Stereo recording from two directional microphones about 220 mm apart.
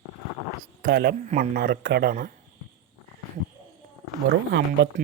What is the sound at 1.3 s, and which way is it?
Speech, 40° right (ahead or behind).